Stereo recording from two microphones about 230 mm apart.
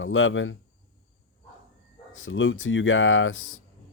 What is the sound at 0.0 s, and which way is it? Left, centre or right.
Speech, left.